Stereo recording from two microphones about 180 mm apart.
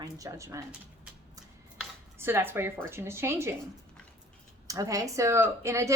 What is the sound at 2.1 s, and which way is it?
Speech, 10° right (ahead or behind).